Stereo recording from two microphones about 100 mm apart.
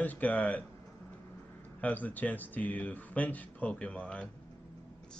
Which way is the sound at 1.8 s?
15° left (ahead or behind).